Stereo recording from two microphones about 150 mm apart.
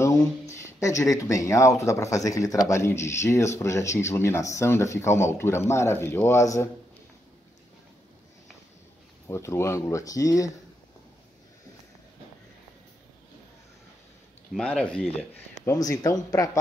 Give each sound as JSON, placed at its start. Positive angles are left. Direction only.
{"t": 0.0, "sound": "speech", "side_deg": 20}
{"t": 9.3, "sound": "speech", "side_deg": 20}
{"t": 14.5, "sound": "speech", "side_deg": 5}
{"t": 15.6, "sound": "speech", "side_deg": 25}